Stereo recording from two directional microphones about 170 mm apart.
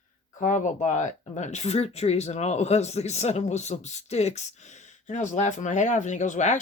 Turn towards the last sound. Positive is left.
turn(degrees=45)  # may be behind; listen again after turning